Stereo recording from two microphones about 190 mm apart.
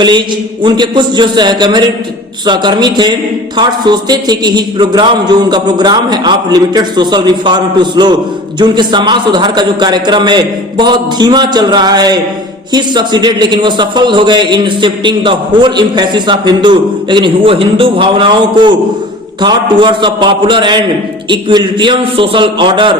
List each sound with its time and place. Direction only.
0.6 s a man's voice: 25° right (ahead or behind)